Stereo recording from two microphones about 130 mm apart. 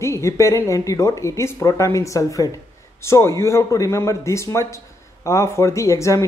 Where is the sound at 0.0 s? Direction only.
20° left (ahead or behind).